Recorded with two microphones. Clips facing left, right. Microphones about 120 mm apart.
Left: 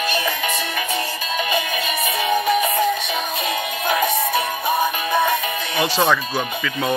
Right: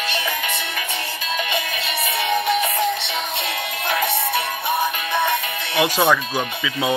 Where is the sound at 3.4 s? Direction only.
20° left (ahead or behind).